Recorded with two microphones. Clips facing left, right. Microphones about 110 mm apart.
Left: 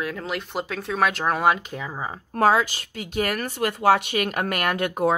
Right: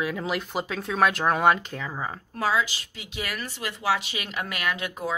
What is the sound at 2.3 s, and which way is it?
Speech, 50° left (ahead or behind).